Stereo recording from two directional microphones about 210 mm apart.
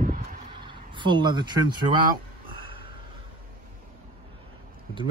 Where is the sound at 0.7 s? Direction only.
20° right (ahead or behind).